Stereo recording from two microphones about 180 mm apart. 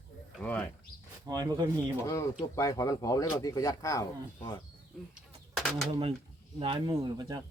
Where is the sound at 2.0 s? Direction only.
15° left (ahead or behind).